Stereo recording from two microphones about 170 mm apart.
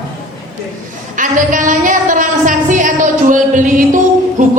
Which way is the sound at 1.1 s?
50° right (ahead or behind).